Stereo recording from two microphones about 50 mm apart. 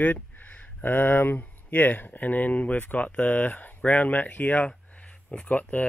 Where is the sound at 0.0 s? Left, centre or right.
Left.